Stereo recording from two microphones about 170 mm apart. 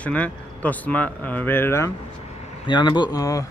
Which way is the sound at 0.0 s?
10° left (ahead or behind).